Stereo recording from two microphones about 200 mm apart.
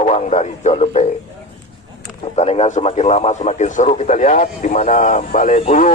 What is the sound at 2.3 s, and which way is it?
A man's voice, 30° left (ahead or behind).